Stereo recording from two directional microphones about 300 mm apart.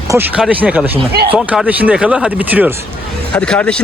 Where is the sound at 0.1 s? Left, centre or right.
Centre.